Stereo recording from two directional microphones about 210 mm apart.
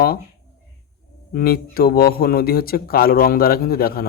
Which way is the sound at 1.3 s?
45° left (ahead or behind).